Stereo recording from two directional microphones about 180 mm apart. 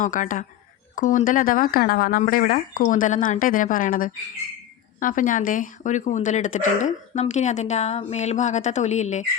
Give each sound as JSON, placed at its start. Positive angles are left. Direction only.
{"t": 0.0, "sound": "speech", "side_deg": 45}